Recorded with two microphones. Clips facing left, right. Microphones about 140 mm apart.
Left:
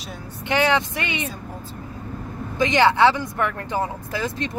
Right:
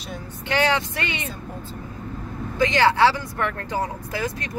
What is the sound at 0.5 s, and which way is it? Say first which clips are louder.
Speech: left 2 dB; 15° left (ahead or behind).